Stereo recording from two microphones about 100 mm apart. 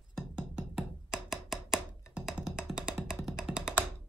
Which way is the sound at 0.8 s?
5° right (ahead or behind).